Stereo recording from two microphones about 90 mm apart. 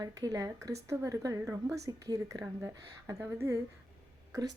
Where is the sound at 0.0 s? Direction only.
45° right (ahead or behind).